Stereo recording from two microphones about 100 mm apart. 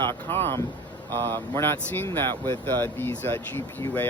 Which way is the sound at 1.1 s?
25° left (ahead or behind).